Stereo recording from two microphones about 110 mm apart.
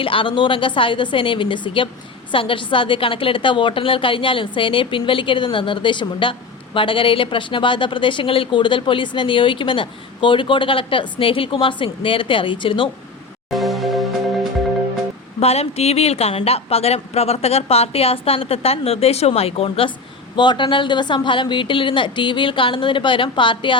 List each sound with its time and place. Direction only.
0.0 s speech: 50° left (ahead or behind)
13.5 s music: centre (ahead or behind)
15.4 s speech: 70° left (ahead or behind)
20.3 s speech: 45° left (ahead or behind)